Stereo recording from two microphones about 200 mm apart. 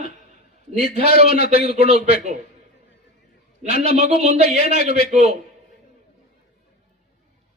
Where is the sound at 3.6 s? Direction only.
35° right (ahead or behind).